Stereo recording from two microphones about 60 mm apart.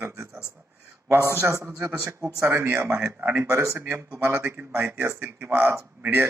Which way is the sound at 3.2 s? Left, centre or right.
Right.